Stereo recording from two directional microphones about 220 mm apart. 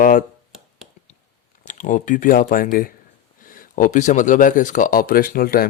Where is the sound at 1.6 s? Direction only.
35° left (ahead or behind).